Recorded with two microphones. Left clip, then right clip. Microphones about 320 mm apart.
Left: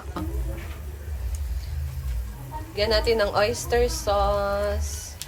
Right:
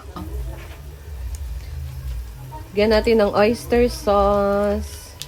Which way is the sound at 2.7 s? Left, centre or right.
Right.